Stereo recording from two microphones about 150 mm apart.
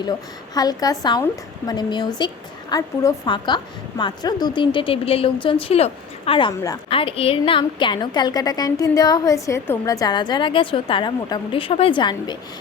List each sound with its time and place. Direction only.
0.0 s a woman's voice: 25° left (ahead or behind)